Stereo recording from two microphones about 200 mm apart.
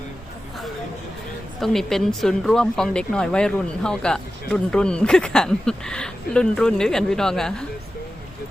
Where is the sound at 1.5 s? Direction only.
Centre (ahead or behind).